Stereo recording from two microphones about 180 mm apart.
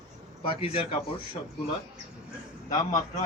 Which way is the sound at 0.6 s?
30° left (ahead or behind).